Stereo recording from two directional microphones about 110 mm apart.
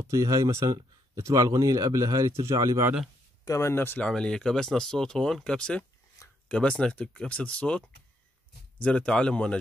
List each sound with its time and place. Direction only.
0.0 s speech: 30° right (ahead or behind)
3.4 s speech: 25° left (ahead or behind)
4.1 s speech: 5° left (ahead or behind)
6.2 s a sound: 30° left (ahead or behind)
6.5 s speech: 10° left (ahead or behind)
8.8 s speech: 10° left (ahead or behind)